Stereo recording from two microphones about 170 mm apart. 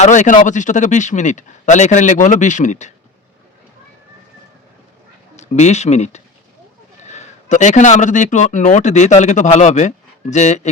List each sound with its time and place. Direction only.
0.0 s a man's voice: 45° left (ahead or behind)
5.4 s a man's voice: 40° left (ahead or behind)